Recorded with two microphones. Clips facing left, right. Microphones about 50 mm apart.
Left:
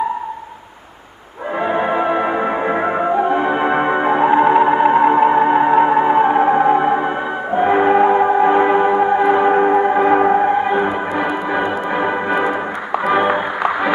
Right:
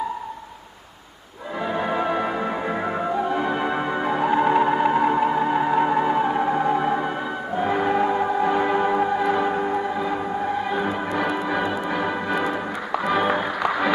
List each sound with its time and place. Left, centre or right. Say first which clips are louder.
1.6 s music: left 6 dB; left